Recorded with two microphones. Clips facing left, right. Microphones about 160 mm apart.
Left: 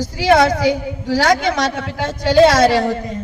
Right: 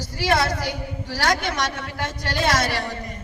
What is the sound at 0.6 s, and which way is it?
A woman's voice, 90° left.